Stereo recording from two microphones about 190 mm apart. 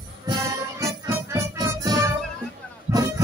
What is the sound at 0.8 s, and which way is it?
Music, 15° right (ahead or behind).